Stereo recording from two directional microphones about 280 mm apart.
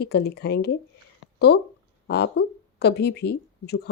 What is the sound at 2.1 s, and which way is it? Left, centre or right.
Speech, left.